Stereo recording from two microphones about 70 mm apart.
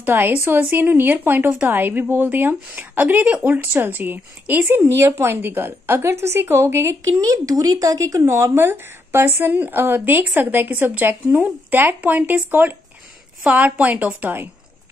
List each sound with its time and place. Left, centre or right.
0.0 s a woman's voice: right
7.1 s speech: right
8.6 s a woman's voice: right